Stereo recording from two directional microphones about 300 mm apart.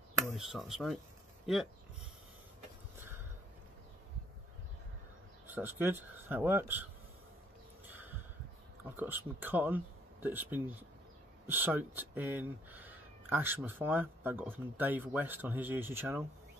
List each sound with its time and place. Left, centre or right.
0.4 s speech: centre
5.5 s speech: centre
7.8 s a sound: centre
8.9 s speech: centre